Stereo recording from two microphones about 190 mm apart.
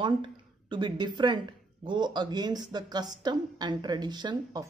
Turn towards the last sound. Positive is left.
turn(degrees=-20)  # may be behind; listen again after turning